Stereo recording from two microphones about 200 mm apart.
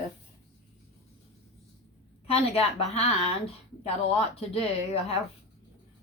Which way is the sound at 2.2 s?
30° left (ahead or behind).